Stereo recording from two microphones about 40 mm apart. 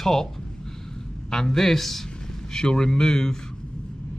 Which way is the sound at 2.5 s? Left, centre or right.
Centre.